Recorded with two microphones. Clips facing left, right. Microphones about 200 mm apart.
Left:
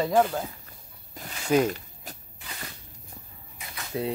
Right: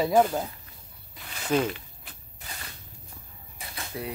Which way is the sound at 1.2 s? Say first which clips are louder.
Left 3 dB; 45° left (ahead or behind).